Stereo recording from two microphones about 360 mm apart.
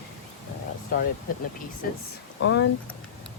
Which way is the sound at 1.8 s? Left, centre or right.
Left.